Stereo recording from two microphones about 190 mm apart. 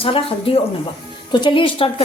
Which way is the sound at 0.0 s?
30° left (ahead or behind).